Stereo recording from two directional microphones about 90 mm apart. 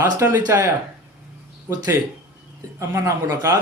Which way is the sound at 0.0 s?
25° right (ahead or behind).